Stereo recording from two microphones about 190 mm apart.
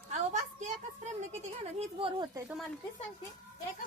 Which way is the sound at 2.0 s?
25° right (ahead or behind).